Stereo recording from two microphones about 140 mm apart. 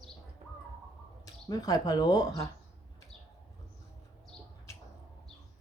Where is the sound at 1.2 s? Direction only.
25° left (ahead or behind).